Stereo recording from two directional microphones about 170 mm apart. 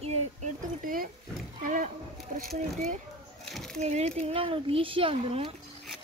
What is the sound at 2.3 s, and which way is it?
Speech, 50° right (ahead or behind).